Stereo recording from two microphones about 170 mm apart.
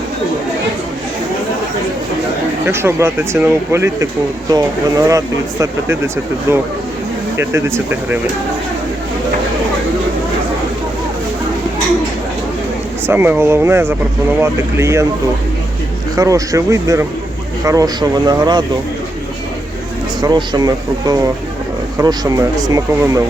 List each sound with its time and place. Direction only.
2.6 s speech: 15° right (ahead or behind)
13.1 s speech: 10° right (ahead or behind)
16.1 s speech: 20° right (ahead or behind)
20.2 s speech: 25° right (ahead or behind)